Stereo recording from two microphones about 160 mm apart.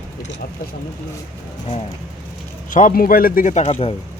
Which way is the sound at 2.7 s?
55° left (ahead or behind).